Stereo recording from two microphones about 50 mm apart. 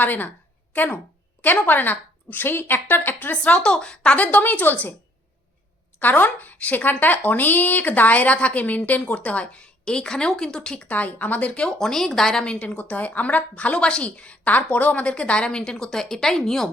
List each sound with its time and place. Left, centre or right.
0.0 s a woman's voice: left
3.4 s a woman's voice: left
6.0 s a woman's voice: left; by 10.8 s centre
10.8 s a woman's voice: left
11.8 s a woman's voice: centre
12.6 s a woman's voice: left
14.8 s a woman's voice: left